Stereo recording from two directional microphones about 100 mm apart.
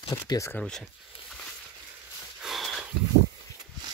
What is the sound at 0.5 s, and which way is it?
Speech, 10° left (ahead or behind).